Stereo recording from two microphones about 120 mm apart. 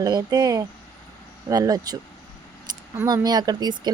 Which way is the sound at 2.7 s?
35° right (ahead or behind).